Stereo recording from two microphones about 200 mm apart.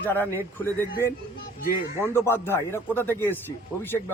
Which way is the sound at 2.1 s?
10° left (ahead or behind).